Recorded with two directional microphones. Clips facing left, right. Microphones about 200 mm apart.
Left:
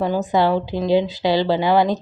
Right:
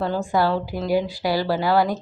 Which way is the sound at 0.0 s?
15° left (ahead or behind).